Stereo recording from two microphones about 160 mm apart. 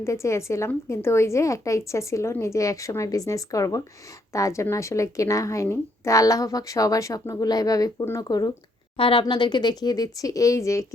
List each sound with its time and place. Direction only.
0.0 s a woman's voice: 20° left (ahead or behind)